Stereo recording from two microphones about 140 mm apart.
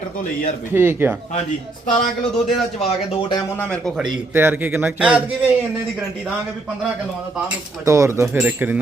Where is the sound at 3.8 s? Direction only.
Centre (ahead or behind).